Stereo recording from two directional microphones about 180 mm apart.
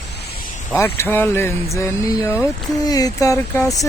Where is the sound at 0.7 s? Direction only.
10° left (ahead or behind).